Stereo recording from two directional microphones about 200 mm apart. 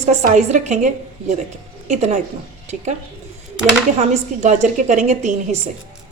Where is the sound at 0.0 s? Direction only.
35° right (ahead or behind).